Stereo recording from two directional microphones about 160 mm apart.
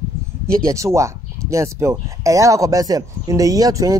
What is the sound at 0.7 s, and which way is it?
Speech, 20° right (ahead or behind).